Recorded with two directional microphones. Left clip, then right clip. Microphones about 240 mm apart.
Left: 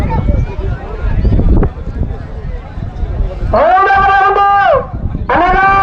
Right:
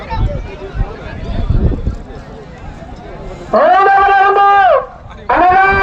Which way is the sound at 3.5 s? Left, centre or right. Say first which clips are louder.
Even; left.